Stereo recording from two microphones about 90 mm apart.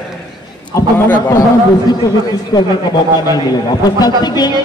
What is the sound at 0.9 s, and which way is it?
Speech, 25° left (ahead or behind).